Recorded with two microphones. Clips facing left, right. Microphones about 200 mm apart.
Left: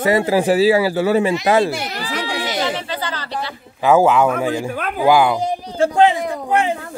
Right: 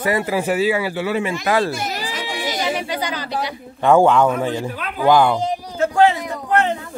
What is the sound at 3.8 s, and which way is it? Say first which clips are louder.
A man's voice: even; 5° left (ahead or behind).